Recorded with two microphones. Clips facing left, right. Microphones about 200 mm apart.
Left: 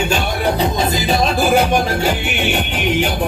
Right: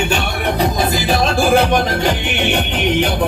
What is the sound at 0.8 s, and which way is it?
Music, 20° left (ahead or behind).